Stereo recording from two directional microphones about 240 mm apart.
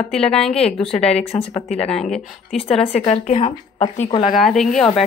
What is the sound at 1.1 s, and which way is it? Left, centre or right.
Speech, left.